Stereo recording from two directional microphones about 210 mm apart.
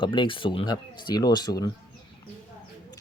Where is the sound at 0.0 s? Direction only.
25° left (ahead or behind).